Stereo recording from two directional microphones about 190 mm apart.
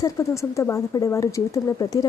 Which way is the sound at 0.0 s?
15° left (ahead or behind).